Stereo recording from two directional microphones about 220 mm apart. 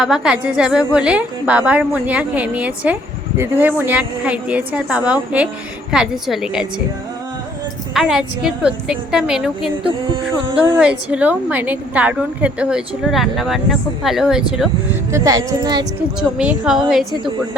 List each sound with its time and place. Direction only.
0.0 s a woman's voice: 5° right (ahead or behind)
7.9 s a woman's voice: 5° right (ahead or behind)
10.8 s a woman's voice: 5° right (ahead or behind)
15.1 s a woman's voice: 15° right (ahead or behind)
16.4 s a woman's voice: 5° right (ahead or behind)